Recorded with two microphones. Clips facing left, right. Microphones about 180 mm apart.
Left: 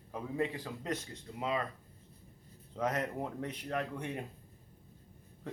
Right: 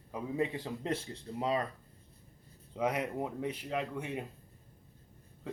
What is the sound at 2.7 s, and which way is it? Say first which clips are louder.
Speech: right 2 dB; 10° right (ahead or behind).